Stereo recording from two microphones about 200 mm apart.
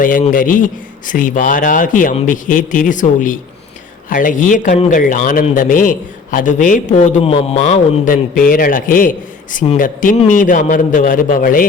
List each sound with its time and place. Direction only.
0.0 s a man's voice: 40° left (ahead or behind)